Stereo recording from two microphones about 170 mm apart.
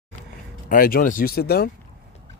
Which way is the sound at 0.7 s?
55° left (ahead or behind).